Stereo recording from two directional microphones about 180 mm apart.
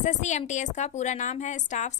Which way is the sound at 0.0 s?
40° left (ahead or behind).